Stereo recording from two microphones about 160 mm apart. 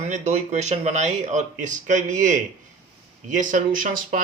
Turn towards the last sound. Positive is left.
turn(degrees=-55)  # may be behind; listen again after turning